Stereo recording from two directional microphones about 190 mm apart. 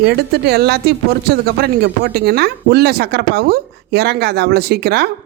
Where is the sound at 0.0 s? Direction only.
60° right (ahead or behind).